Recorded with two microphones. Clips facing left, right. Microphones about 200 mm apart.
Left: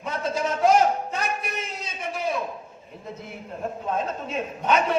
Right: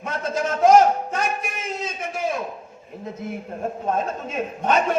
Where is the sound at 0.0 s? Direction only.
45° right (ahead or behind).